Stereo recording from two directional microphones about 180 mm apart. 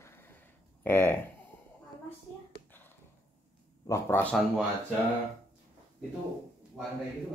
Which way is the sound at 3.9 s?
15° left (ahead or behind).